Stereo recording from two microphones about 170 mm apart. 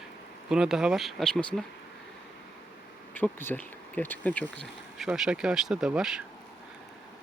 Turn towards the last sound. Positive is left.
turn(degrees=-5)  # may be behind; listen again after turning